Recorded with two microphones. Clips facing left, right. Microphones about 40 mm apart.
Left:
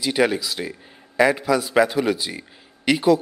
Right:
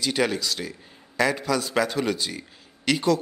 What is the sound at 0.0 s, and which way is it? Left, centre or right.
A man's voice, centre.